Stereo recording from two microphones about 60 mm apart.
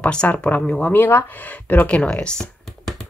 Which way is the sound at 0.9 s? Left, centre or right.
Left.